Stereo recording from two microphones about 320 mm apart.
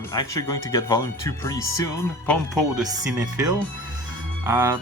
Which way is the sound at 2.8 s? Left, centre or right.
Centre.